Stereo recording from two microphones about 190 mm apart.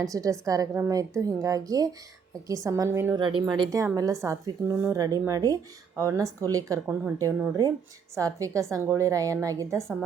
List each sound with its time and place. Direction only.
0.0 s a woman's voice: 15° right (ahead or behind)